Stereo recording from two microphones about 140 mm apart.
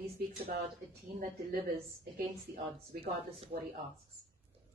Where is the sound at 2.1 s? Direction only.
90° right.